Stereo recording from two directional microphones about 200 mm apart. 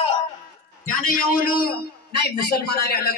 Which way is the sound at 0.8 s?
45° left (ahead or behind).